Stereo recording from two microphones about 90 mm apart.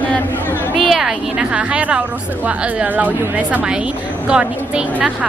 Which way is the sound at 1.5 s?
15° right (ahead or behind).